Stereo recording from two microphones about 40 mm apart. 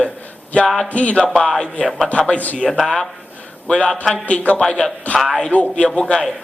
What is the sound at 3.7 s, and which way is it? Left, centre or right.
Speech, left.